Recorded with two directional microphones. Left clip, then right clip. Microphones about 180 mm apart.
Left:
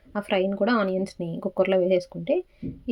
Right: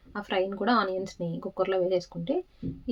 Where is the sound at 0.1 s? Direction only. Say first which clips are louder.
Left 4 dB; 25° left (ahead or behind).